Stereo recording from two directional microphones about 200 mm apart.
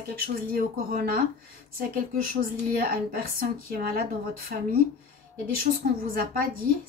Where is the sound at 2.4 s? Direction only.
45° right (ahead or behind).